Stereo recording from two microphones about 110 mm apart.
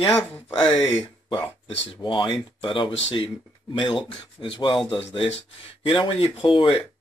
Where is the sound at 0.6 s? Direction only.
40° left (ahead or behind).